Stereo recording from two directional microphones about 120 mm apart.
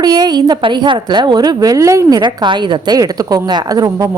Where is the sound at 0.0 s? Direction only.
35° right (ahead or behind).